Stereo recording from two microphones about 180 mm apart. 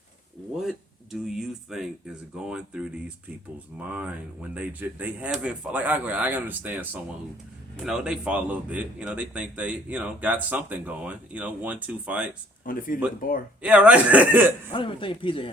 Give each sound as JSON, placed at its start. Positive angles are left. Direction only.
{"t": 0.5, "sound": "speech", "side_deg": 0}
{"t": 4.5, "sound": "speech", "side_deg": -10}
{"t": 12.6, "sound": "speech", "side_deg": 50}
{"t": 13.6, "sound": "speech", "side_deg": -5}
{"t": 14.7, "sound": "speech", "side_deg": 30}